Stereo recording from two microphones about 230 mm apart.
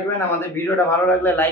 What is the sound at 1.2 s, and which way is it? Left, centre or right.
Speech, centre.